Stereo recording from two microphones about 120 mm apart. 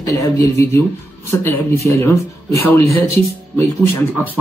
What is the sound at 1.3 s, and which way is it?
Speech, 20° left (ahead or behind).